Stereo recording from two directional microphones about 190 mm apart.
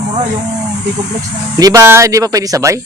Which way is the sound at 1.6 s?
15° right (ahead or behind).